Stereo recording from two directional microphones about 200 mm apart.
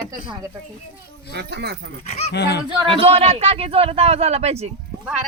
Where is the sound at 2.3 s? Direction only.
55° left (ahead or behind).